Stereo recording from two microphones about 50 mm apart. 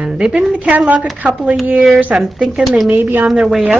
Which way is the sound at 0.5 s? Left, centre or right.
Right.